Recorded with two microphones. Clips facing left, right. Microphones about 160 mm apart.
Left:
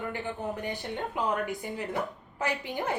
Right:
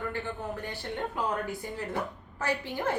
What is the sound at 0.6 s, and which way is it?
Speech, 15° left (ahead or behind).